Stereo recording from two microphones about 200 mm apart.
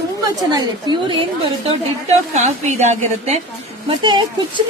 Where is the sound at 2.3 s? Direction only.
35° right (ahead or behind).